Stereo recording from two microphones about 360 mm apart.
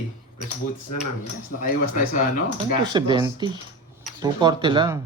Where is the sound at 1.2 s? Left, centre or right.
Left.